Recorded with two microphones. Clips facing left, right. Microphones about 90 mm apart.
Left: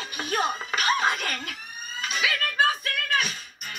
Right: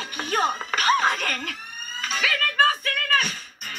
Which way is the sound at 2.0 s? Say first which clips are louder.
Right 2 dB; 40° right (ahead or behind).